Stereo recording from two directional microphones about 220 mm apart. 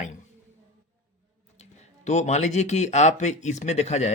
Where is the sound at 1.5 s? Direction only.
30° left (ahead or behind).